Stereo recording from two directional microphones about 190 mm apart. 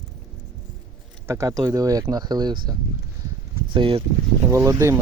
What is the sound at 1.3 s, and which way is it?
Speech, 15° right (ahead or behind).